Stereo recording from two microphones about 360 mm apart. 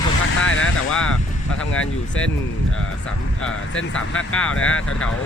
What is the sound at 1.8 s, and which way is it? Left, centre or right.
Speech, left.